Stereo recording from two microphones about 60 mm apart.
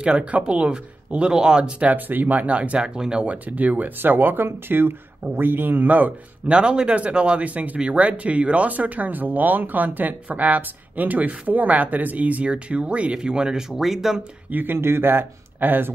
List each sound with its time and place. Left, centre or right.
0.0 s speech: centre
2.0 s speech: right; by 3.3 s centre
3.3 s speech: right
6.4 s speech: centre
14.5 s speech: right